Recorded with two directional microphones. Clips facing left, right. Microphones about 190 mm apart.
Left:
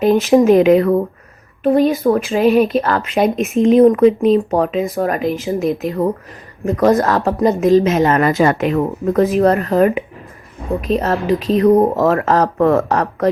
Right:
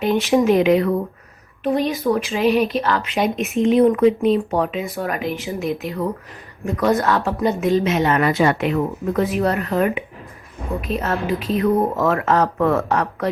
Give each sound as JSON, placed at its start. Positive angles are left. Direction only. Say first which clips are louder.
{"t": 0.0, "sound": "a woman's voice", "louder": "left 6 dB", "side_deg": 40}
{"t": 6.7, "sound": "a woman's voice", "louder": "left 5 dB", "side_deg": 40}